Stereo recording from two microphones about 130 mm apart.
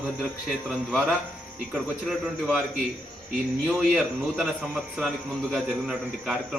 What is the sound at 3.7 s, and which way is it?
A man's voice, 5° right (ahead or behind).